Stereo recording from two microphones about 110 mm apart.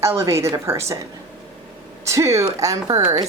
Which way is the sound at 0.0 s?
25° right (ahead or behind).